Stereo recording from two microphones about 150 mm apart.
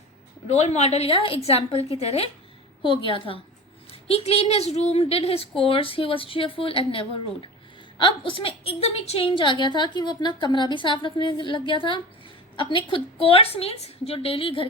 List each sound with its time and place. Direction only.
0.4 s a woman's voice: 45° left (ahead or behind)